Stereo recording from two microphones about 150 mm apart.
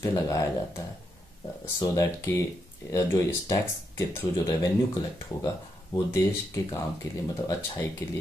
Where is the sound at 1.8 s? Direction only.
20° left (ahead or behind).